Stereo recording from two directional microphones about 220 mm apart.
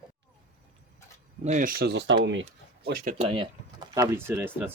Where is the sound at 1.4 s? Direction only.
35° right (ahead or behind).